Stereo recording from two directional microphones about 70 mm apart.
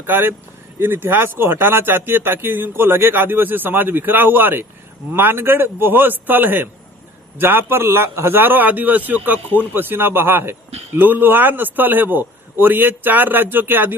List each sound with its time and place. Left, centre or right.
0.0 s speech: right